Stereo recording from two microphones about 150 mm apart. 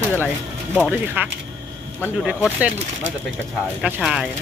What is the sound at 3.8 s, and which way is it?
Speech, 5° right (ahead or behind).